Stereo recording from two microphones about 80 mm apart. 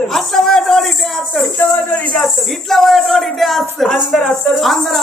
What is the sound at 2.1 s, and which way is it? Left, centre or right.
Speech, centre.